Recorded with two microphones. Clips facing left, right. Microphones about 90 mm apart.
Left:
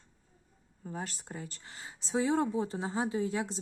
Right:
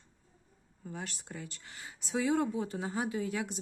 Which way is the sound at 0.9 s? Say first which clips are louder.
Left 2 dB; 35° left (ahead or behind).